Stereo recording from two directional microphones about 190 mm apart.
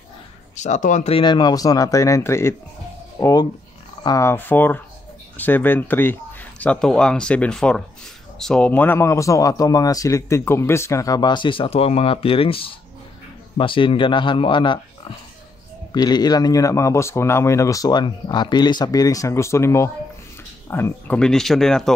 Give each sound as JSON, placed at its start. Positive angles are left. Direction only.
{"t": 0.6, "sound": "a man's voice", "side_deg": 40}
{"t": 15.9, "sound": "a man's voice", "side_deg": 20}